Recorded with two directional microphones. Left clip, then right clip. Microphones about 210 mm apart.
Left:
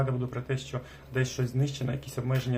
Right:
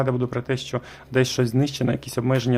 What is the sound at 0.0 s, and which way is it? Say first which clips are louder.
Speech: right 9 dB; 50° right (ahead or behind).